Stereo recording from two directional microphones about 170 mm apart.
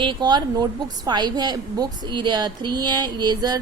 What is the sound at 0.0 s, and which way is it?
A woman's voice, 25° right (ahead or behind).